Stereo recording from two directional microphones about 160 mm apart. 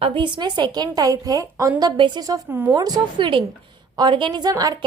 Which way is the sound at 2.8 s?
25° right (ahead or behind).